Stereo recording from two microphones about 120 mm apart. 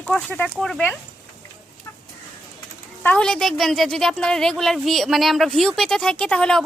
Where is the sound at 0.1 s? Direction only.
5° left (ahead or behind).